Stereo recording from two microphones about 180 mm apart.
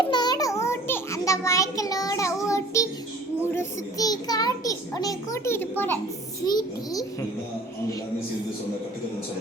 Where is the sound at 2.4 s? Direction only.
15° left (ahead or behind).